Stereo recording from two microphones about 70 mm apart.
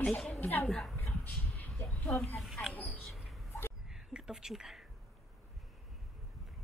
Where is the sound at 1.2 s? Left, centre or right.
Left.